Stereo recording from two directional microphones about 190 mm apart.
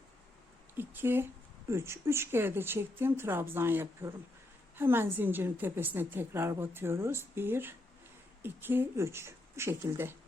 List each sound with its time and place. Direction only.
0.8 s a woman's voice: 10° right (ahead or behind)